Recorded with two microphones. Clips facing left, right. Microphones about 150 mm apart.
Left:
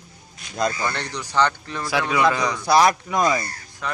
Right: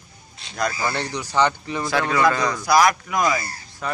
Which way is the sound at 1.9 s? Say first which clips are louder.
Even; 10° left (ahead or behind).